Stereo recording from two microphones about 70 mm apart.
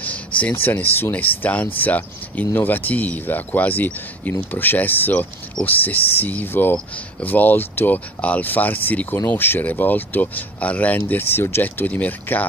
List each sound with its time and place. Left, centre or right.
0.0 s speech: left
11.8 s speech: left